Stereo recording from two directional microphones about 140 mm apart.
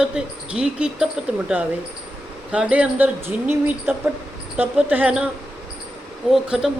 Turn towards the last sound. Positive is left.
turn(degrees=-5)  # may be behind; listen again after turning